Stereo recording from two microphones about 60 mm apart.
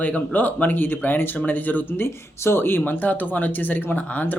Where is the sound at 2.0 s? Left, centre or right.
Left.